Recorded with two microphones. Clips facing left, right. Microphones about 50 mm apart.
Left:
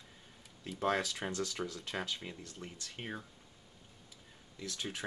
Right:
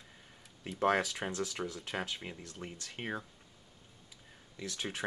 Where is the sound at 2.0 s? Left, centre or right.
Right.